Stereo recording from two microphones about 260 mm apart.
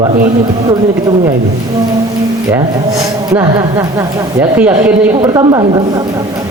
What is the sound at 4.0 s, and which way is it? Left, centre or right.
A woman's voice, centre.